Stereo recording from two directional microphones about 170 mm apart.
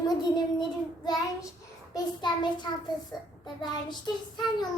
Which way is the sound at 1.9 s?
25° left (ahead or behind).